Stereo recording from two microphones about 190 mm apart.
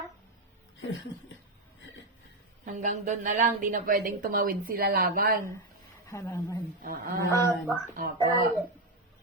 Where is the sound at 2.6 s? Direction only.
40° right (ahead or behind).